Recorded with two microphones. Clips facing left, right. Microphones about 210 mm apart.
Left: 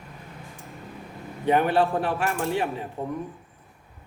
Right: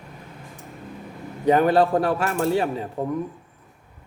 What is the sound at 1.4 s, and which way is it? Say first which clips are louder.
A man's voice: right 4 dB; 40° right (ahead or behind).